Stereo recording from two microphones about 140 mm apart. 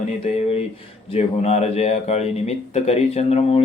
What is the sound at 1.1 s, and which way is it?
Speech, 50° left (ahead or behind).